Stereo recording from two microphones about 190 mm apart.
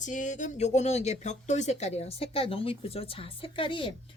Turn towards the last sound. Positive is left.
turn(degrees=25)  # may be behind; listen again after turning